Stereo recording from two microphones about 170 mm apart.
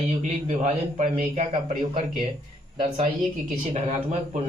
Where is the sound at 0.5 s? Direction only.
40° right (ahead or behind).